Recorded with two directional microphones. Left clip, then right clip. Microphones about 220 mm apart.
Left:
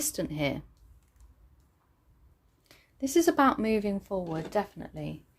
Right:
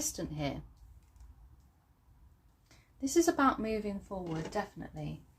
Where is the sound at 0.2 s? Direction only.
45° left (ahead or behind).